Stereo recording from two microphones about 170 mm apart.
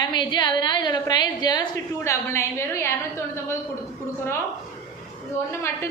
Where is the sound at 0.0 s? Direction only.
25° left (ahead or behind).